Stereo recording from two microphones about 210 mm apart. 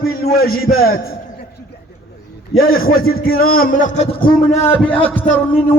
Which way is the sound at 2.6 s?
45° left (ahead or behind).